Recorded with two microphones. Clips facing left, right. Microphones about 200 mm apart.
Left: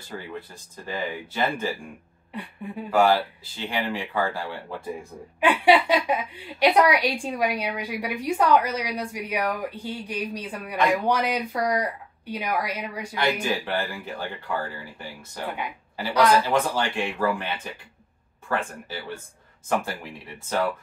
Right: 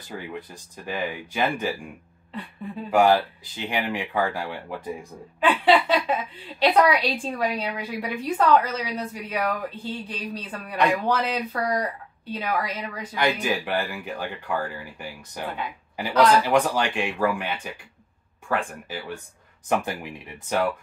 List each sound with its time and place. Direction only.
0.3 s speech: 15° right (ahead or behind)
2.3 s a woman's voice: 15° left (ahead or behind)
2.9 s speech: 15° right (ahead or behind)
5.4 s a woman's voice: 15° left (ahead or behind)
13.1 s speech: 15° right (ahead or behind)
15.4 s a woman's voice: 15° left (ahead or behind)
16.4 s speech: 15° right (ahead or behind)